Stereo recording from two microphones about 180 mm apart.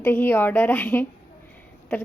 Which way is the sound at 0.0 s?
10° left (ahead or behind).